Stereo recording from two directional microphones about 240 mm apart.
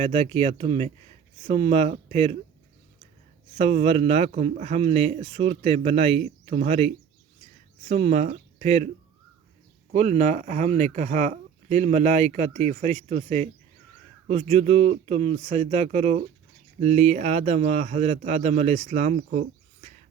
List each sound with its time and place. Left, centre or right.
0.0 s speech: right
3.6 s speech: right
9.9 s speech: right